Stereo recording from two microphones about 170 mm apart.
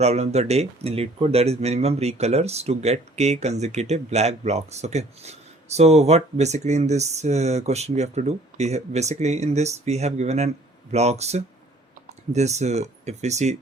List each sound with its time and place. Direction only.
0.0 s speech: 40° right (ahead or behind)